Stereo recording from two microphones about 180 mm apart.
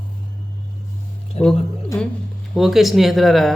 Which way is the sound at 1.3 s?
35° left (ahead or behind).